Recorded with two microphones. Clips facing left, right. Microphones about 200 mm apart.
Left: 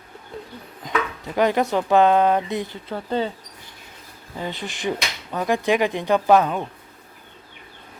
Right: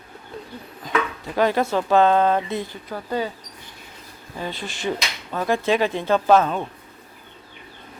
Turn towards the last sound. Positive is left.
turn(degrees=15)  # may be behind; listen again after turning